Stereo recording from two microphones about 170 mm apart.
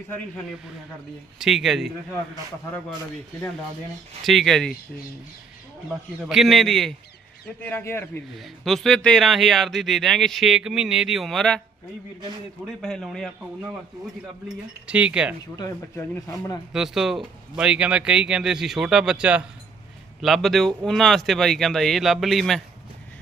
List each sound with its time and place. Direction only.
1.4 s speech: centre (ahead or behind)
4.2 s speech: centre (ahead or behind)
6.2 s speech: centre (ahead or behind); by 8.2 s 15° left (ahead or behind)
8.4 s speech: centre (ahead or behind)
12.8 s speech: centre (ahead or behind)
14.4 s speech: 5° right (ahead or behind)
15.5 s speech: 25° left (ahead or behind)
16.7 s speech: 5° right (ahead or behind)